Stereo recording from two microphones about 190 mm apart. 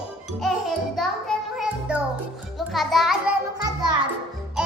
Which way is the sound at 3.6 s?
20° right (ahead or behind).